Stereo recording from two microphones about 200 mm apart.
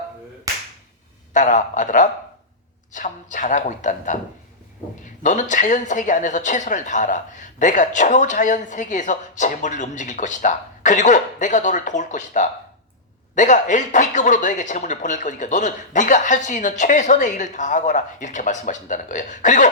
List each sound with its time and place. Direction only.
1.3 s a woman's voice: 40° left (ahead or behind)
5.2 s a woman's voice: 40° left (ahead or behind)